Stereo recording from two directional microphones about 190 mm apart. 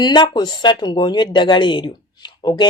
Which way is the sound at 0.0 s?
25° left (ahead or behind).